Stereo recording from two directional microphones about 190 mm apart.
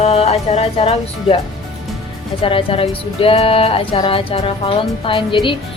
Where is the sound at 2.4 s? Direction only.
30° left (ahead or behind).